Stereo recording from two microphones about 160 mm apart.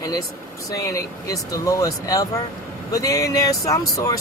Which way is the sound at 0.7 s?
20° left (ahead or behind).